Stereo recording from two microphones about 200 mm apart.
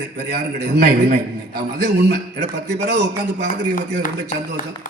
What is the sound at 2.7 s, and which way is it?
Speech, 55° right (ahead or behind).